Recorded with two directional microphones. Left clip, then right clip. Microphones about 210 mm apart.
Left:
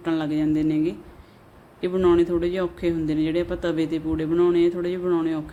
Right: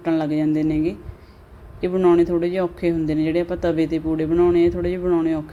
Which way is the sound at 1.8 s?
Centre (ahead or behind).